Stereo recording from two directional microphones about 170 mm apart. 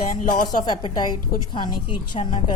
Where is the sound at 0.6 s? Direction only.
25° left (ahead or behind).